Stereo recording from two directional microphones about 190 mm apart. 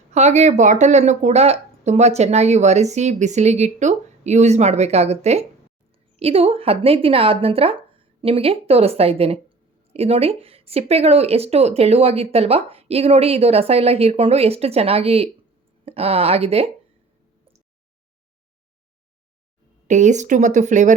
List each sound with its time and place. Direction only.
0.1 s speech: 35° right (ahead or behind)
19.9 s speech: 40° right (ahead or behind)